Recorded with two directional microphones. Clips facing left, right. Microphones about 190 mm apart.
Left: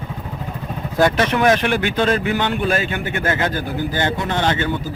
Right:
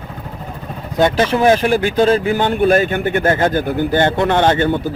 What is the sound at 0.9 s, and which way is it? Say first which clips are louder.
A man's voice: right 2 dB; 25° right (ahead or behind).